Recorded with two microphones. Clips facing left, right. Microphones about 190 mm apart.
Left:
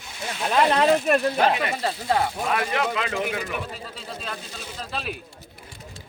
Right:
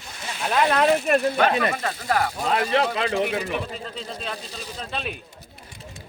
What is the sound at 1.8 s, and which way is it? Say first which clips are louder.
Speech: left 1 dB; 25° left (ahead or behind).